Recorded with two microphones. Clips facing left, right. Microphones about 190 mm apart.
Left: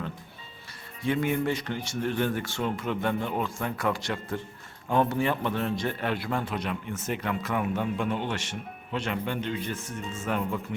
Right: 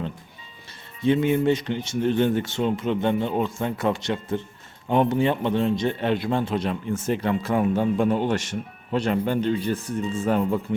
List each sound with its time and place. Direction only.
1.0 s a man's voice: 20° right (ahead or behind)